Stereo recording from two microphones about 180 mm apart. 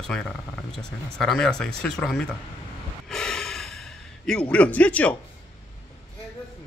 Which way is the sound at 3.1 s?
5° left (ahead or behind).